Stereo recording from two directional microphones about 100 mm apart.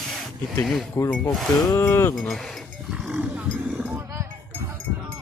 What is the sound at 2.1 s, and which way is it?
Roaring cats, centre (ahead or behind).